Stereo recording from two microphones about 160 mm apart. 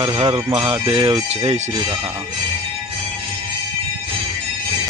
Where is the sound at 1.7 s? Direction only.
25° right (ahead or behind).